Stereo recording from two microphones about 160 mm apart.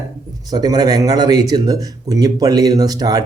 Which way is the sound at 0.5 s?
25° right (ahead or behind).